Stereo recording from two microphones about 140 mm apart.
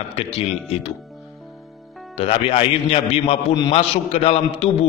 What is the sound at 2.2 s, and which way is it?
A man's voice, 45° left (ahead or behind).